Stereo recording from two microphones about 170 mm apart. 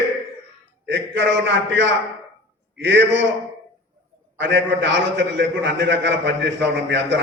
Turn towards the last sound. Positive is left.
turn(degrees=-90)